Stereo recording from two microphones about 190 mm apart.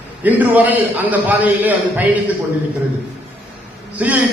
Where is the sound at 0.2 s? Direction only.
10° right (ahead or behind).